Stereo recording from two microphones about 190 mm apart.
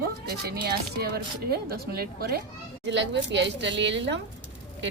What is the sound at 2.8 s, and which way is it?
A woman's voice, 65° right (ahead or behind).